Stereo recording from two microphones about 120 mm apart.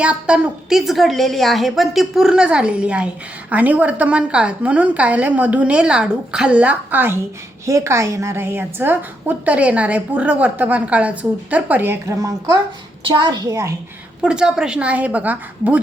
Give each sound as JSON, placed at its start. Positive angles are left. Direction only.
{"t": 0.0, "sound": "a woman's voice", "side_deg": -10}
{"t": 12.0, "sound": "a woman's voice", "side_deg": -30}
{"t": 13.1, "sound": "a child's voice", "side_deg": -40}
{"t": 14.2, "sound": "a woman's voice", "side_deg": -5}